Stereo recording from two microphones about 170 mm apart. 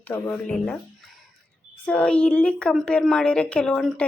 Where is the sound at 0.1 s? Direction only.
10° left (ahead or behind).